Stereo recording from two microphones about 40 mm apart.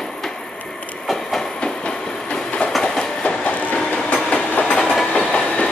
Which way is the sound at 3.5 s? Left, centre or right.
Left.